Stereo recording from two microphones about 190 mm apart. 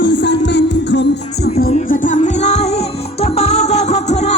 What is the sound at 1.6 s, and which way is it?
Music, 45° left (ahead or behind).